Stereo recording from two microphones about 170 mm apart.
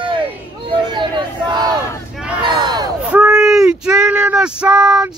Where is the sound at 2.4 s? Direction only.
25° right (ahead or behind).